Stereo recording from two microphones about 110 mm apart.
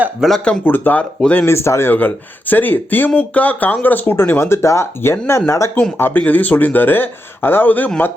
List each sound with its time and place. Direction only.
0.3 s speech: 5° left (ahead or behind)
0.6 s speech: 15° left (ahead or behind)